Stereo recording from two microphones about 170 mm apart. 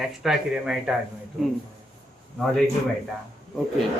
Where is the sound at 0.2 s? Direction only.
5° right (ahead or behind).